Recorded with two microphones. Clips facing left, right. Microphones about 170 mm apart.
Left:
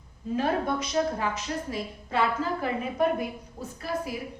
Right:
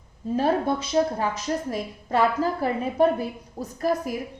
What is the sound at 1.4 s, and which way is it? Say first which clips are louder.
A woman's voice: right 5 dB; 40° right (ahead or behind).